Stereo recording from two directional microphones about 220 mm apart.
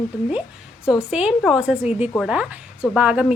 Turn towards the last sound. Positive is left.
turn(degrees=-5)  # may be behind; listen again after turning